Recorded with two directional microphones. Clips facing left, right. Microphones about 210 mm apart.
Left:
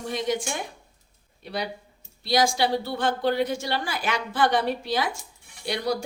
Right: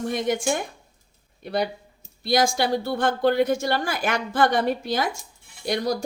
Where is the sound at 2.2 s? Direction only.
50° right (ahead or behind).